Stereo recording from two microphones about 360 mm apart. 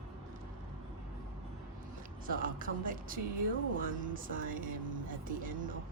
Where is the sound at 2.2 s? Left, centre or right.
Right.